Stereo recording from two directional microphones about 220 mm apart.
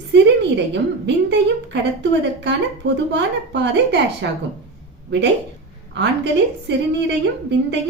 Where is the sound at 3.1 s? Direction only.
55° right (ahead or behind).